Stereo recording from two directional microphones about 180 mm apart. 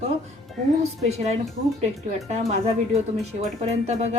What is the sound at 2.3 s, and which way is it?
Speech, 40° right (ahead or behind).